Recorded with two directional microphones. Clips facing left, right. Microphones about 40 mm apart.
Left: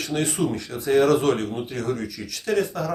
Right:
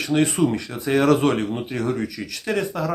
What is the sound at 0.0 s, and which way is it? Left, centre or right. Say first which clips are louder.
Speech: right 5 dB; right.